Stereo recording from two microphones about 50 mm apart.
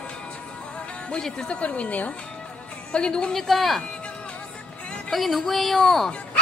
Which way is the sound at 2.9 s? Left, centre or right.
Centre.